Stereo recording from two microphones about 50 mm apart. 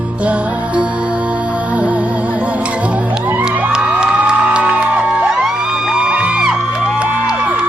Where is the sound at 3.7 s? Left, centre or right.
Centre.